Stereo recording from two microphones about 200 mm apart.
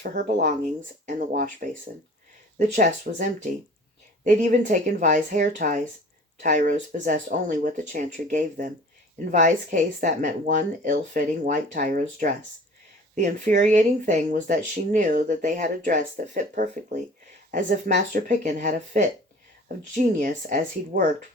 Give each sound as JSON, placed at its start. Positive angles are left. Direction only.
{"t": 0.4, "sound": "speech", "side_deg": -40}